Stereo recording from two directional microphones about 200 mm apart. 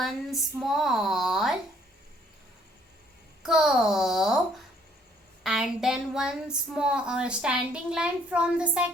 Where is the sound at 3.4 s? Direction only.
5° right (ahead or behind).